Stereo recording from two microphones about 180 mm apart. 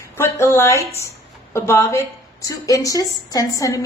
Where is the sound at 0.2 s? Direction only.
15° left (ahead or behind).